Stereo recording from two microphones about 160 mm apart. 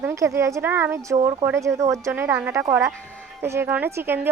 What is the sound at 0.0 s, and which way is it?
Speech, 20° right (ahead or behind).